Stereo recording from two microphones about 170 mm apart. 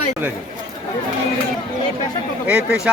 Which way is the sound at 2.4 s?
5° right (ahead or behind).